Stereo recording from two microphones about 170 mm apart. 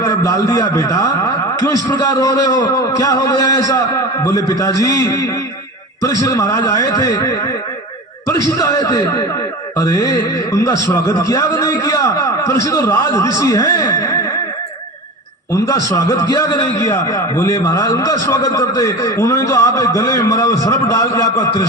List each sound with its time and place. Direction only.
0.0 s a man's voice: 20° left (ahead or behind)
15.5 s a man's voice: 20° left (ahead or behind)